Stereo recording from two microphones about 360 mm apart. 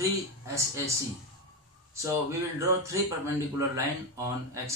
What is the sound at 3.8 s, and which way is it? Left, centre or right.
Speech, centre.